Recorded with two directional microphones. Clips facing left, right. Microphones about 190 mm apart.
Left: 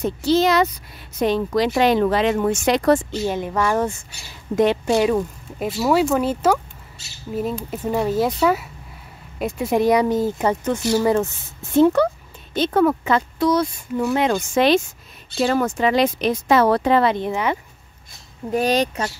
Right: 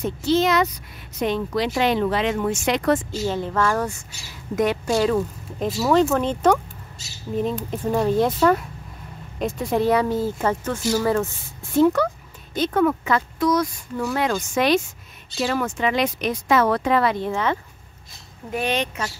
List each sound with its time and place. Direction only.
0.0 s speech: 35° left (ahead or behind)
3.3 s a woman's voice: 15° left (ahead or behind)
15.4 s speech: 40° left (ahead or behind); by 17.6 s 15° left (ahead or behind)
18.5 s speech: 40° left (ahead or behind)